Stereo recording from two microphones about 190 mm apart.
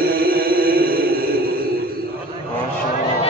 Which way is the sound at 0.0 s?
50° right (ahead or behind).